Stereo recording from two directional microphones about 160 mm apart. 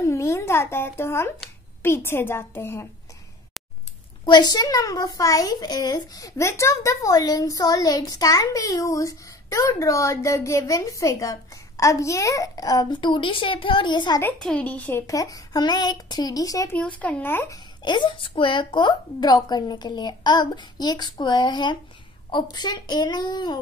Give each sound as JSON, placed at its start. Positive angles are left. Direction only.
{"t": 0.0, "sound": "a child's voice", "side_deg": 20}
{"t": 4.3, "sound": "a child's voice", "side_deg": 25}
{"t": 14.2, "sound": "a child's voice", "side_deg": 5}
{"t": 17.0, "sound": "a child's voice", "side_deg": 10}
{"t": 17.8, "sound": "a child's voice", "side_deg": 30}